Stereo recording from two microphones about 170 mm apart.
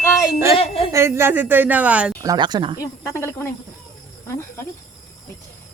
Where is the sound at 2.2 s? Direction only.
25° right (ahead or behind).